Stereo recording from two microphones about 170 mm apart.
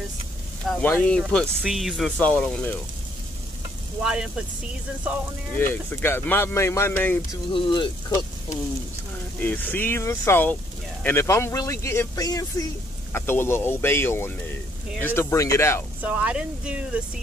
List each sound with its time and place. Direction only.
0.7 s speech: 10° left (ahead or behind)
4.0 s speech: 5° right (ahead or behind)
5.6 s speech: 10° left (ahead or behind)
7.5 s speech: 30° left (ahead or behind)
9.4 s speech: 10° left (ahead or behind)
16.0 s speech: 10° right (ahead or behind)